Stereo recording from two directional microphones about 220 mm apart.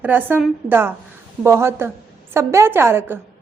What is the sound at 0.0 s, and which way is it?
A woman's voice, 10° right (ahead or behind).